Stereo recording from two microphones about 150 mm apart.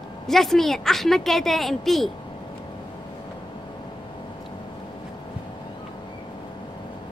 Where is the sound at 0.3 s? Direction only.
Centre (ahead or behind).